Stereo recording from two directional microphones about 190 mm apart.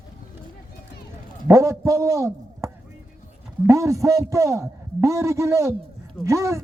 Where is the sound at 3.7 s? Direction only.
15° right (ahead or behind).